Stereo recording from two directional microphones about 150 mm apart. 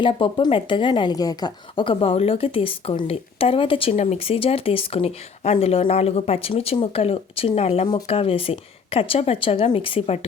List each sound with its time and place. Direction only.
0.0 s a woman's voice: 35° left (ahead or behind)